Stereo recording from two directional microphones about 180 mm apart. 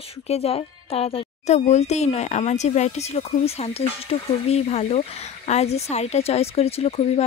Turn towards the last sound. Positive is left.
turn(degrees=35)  # may be behind; listen again after turning